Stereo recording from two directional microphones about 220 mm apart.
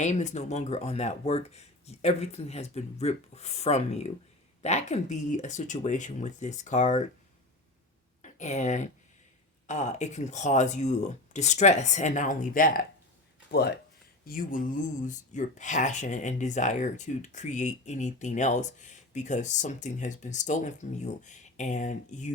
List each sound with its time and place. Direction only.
0.0 s speech: 30° left (ahead or behind)
8.2 s speech: 35° left (ahead or behind)